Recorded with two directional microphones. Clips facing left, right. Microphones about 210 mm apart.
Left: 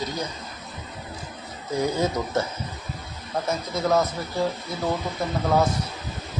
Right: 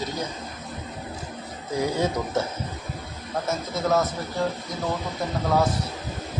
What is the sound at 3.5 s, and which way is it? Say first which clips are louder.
Speech: left 1 dB; centre (ahead or behind).